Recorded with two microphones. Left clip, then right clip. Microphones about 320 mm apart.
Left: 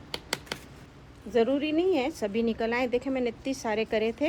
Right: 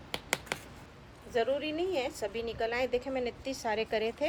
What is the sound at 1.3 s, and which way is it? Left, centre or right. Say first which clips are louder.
A woman's voice: left 6 dB; centre.